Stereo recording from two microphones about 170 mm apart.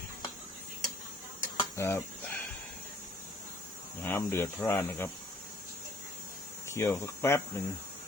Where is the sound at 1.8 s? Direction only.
15° left (ahead or behind).